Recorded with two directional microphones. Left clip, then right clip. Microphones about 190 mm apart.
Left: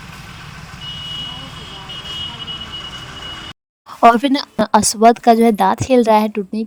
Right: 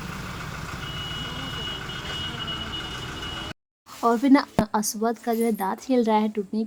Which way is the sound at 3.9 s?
40° left (ahead or behind).